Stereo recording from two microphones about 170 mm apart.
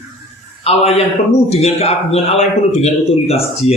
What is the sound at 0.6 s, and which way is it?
A man's voice, 35° left (ahead or behind).